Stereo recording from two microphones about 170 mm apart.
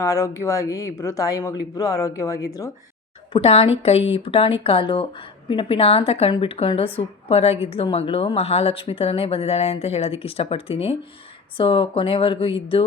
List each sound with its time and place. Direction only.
0.0 s speech: 15° left (ahead or behind)
3.3 s a woman's voice: 35° left (ahead or behind)